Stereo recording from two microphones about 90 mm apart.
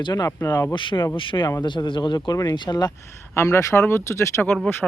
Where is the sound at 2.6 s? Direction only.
45° left (ahead or behind).